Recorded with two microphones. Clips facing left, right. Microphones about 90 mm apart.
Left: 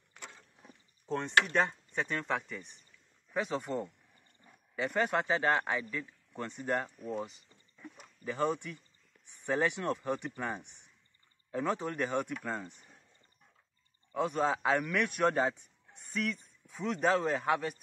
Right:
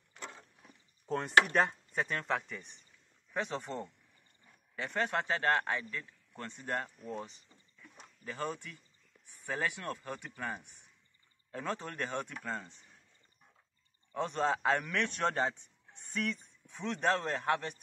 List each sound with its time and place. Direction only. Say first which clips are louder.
1.0 s chopping: even; 5° right (ahead or behind)
1.5 s speech: even; 5° right (ahead or behind); by 12.7 s 10° left (ahead or behind)
14.1 s speech: left 2 dB; 5° left (ahead or behind)